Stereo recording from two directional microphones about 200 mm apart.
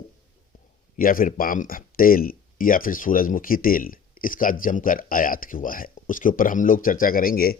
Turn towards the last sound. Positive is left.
turn(degrees=50)  # may be behind; listen again after turning